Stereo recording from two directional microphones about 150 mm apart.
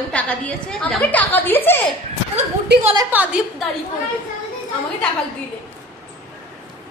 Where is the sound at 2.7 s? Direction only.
90° right.